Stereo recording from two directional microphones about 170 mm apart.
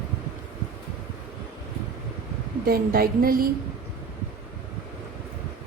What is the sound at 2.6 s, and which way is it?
Speech, 60° right (ahead or behind).